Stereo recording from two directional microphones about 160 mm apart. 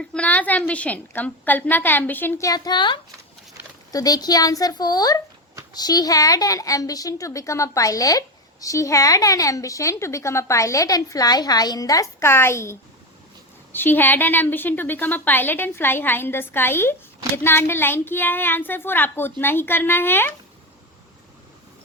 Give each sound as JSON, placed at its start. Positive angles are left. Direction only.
{"t": 0.0, "sound": "a woman's voice", "side_deg": 5}
{"t": 13.7, "sound": "a woman's voice", "side_deg": 10}